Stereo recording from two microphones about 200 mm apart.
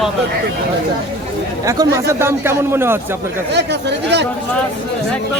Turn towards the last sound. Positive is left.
turn(degrees=-60)  # may be behind; listen again after turning